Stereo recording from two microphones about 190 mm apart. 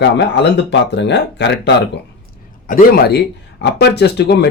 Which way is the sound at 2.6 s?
50° left (ahead or behind).